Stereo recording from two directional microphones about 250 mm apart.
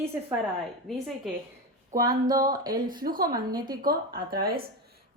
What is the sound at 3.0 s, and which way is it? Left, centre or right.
Speech, right.